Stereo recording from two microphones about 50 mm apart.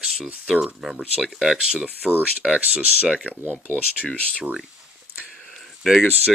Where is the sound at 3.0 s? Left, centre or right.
Centre.